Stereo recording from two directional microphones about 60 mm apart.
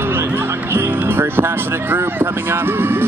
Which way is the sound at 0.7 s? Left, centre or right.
Right.